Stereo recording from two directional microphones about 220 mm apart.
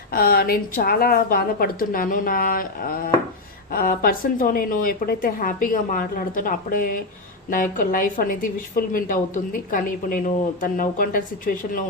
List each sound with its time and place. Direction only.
0.1 s a woman's voice: 40° left (ahead or behind)